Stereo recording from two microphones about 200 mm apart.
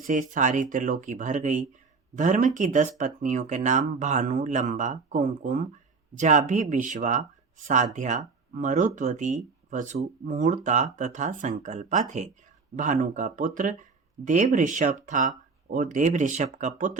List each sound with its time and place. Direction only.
0.0 s speech: 40° right (ahead or behind)